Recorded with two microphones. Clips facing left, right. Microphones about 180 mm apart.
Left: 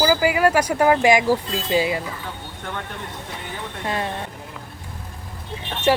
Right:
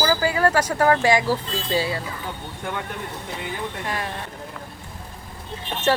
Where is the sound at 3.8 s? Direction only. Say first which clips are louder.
Left 6 dB; 25° left (ahead or behind).